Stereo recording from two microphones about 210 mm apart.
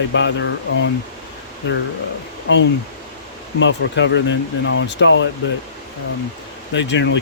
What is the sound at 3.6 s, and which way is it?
Speech, 60° left (ahead or behind).